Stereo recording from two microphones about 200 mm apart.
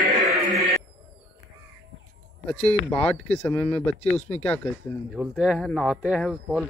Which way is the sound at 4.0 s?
35° left (ahead or behind).